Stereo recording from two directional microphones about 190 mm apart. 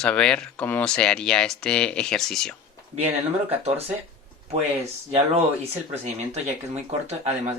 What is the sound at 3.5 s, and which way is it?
Speech, 30° right (ahead or behind).